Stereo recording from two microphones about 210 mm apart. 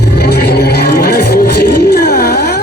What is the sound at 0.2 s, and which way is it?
Music, 50° left (ahead or behind).